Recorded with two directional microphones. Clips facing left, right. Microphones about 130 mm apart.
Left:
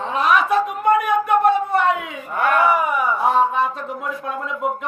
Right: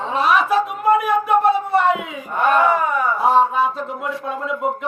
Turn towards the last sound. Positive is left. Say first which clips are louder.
# right 2 dB
turn(degrees=0)  # may be behind; listen again after turning